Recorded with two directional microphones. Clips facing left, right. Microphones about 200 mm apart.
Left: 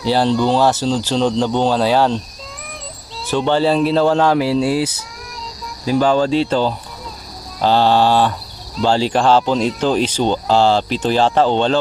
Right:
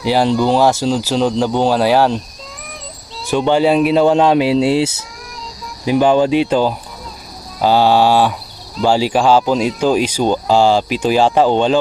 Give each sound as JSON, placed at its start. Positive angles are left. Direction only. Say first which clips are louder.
{"t": 0.0, "sound": "speech", "louder": "right 1 dB", "side_deg": -10}
{"t": 3.3, "sound": "speech", "louder": "right 2 dB", "side_deg": -15}